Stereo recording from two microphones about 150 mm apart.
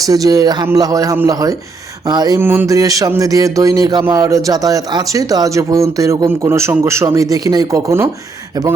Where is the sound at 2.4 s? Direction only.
15° right (ahead or behind).